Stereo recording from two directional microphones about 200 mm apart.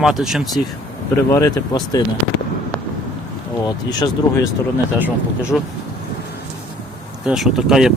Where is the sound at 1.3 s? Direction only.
15° left (ahead or behind).